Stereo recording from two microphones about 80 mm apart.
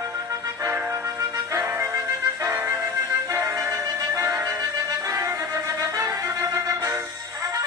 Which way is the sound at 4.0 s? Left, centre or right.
Right.